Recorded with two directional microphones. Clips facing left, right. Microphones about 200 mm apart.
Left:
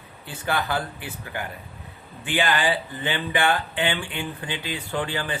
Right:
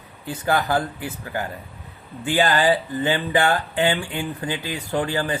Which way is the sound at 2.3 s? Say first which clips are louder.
Right 5 dB; 40° right (ahead or behind).